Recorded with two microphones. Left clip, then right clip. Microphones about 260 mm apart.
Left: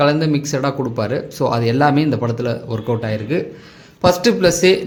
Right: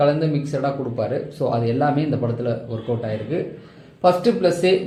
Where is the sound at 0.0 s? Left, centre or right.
Left.